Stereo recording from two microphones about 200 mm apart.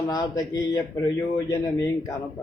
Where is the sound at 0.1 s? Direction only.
15° left (ahead or behind).